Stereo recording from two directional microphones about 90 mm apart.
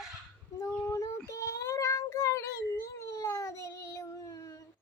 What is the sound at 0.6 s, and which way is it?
Child singing, 35° left (ahead or behind).